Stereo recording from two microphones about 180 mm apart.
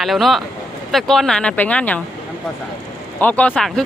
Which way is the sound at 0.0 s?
Centre (ahead or behind).